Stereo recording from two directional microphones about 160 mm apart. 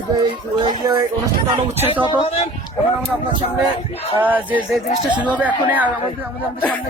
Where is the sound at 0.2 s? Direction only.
25° right (ahead or behind).